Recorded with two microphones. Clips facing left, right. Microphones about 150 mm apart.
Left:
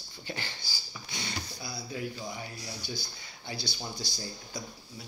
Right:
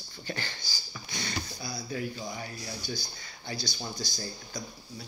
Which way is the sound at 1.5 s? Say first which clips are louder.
Right 2 dB; 10° left (ahead or behind).